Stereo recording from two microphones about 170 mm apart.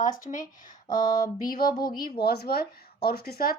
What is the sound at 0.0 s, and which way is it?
Speech, 50° left (ahead or behind).